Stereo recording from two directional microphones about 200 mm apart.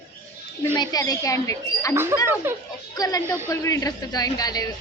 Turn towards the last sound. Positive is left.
turn(degrees=20)  # may be behind; listen again after turning